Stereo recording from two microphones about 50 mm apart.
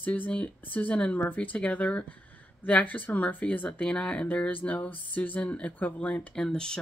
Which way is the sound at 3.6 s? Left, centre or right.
Left.